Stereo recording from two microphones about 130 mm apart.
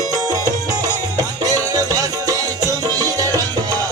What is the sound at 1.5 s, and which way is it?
Music, 25° right (ahead or behind).